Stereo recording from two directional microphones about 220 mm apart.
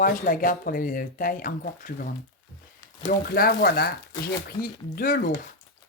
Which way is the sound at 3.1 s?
40° left (ahead or behind).